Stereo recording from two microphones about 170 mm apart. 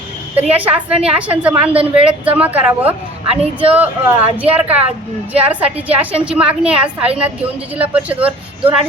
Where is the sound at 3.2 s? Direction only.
35° right (ahead or behind).